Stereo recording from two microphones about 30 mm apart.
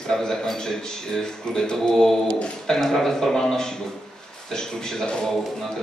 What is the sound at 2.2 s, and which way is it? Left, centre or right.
Speech, left.